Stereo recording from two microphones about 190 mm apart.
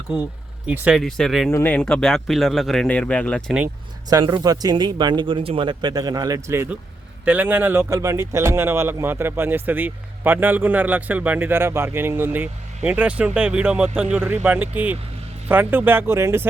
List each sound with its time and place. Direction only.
0.7 s speech: 5° right (ahead or behind)
4.1 s speech: 20° right (ahead or behind)